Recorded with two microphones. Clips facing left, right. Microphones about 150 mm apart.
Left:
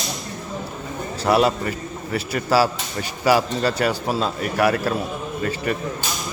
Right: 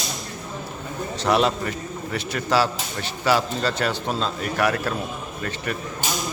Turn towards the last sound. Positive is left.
turn(degrees=5)  # may be behind; listen again after turning